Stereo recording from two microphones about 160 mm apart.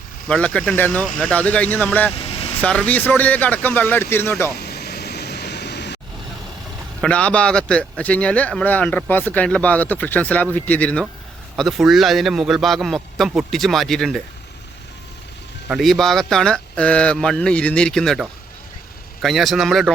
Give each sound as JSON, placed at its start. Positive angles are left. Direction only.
{"t": 0.3, "sound": "a man's voice", "side_deg": 5}
{"t": 2.1, "sound": "vehicle", "side_deg": 35}
{"t": 2.6, "sound": "a man's voice", "side_deg": 5}
{"t": 4.5, "sound": "vehicle", "side_deg": 85}
{"t": 7.0, "sound": "a man's voice", "side_deg": 5}
{"t": 15.7, "sound": "a man's voice", "side_deg": 0}